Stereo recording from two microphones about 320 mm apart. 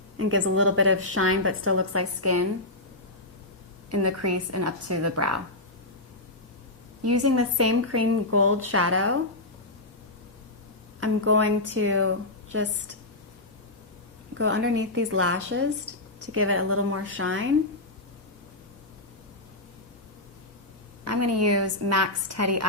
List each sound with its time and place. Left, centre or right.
0.2 s a woman's voice: right
3.8 s a woman's voice: right
7.1 s a woman's voice: right
11.0 s a woman's voice: right
14.3 s a woman's voice: right
21.0 s a woman's voice: right